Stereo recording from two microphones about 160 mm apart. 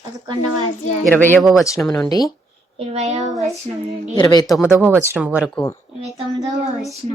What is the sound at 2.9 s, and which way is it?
Child singing, 45° right (ahead or behind).